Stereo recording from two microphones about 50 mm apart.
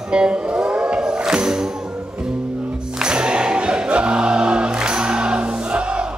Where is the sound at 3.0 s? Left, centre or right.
Centre.